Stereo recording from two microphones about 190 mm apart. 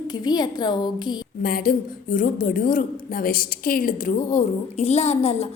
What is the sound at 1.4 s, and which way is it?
A woman's voice, 50° left (ahead or behind).